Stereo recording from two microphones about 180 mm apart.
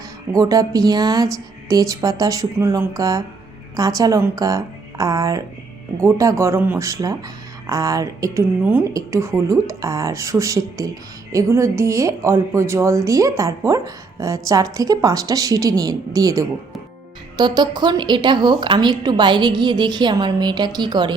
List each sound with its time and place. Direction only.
0.3 s a woman's voice: 20° right (ahead or behind)